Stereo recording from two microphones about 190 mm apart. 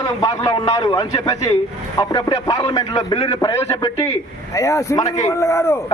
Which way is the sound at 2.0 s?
20° left (ahead or behind).